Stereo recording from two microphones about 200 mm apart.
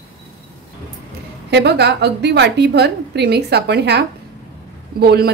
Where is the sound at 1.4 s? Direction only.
55° right (ahead or behind).